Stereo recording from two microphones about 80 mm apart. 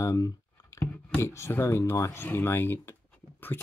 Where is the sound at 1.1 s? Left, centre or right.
Left.